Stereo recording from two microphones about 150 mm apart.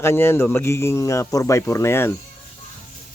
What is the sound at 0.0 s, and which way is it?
A man's voice, 15° left (ahead or behind).